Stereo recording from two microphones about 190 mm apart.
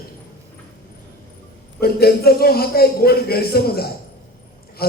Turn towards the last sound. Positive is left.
turn(degrees=55)  # may be behind; listen again after turning